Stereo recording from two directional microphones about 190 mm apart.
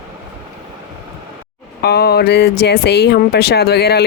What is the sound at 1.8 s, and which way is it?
Speech, 55° left (ahead or behind).